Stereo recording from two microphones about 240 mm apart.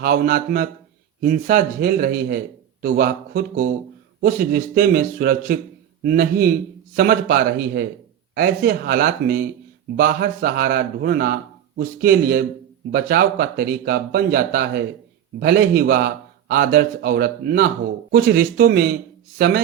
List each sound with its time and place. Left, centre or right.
0.0 s speech: right